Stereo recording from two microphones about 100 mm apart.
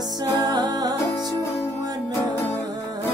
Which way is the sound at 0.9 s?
30° left (ahead or behind).